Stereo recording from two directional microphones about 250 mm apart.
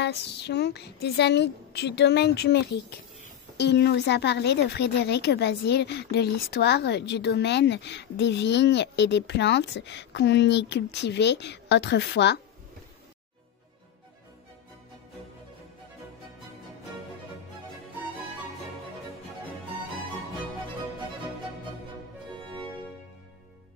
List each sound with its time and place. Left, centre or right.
0.0 s a woman's voice: left